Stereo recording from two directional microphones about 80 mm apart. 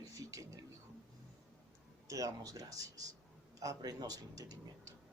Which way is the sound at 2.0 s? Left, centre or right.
Right.